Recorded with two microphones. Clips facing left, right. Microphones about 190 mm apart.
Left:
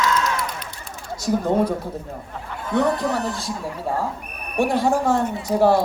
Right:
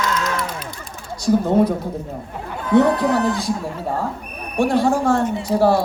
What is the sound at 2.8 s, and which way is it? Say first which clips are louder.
Speech: right 4 dB; 65° right (ahead or behind).